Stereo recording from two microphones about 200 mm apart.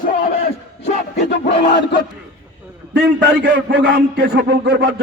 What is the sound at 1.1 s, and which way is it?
Battle cry, 60° left (ahead or behind).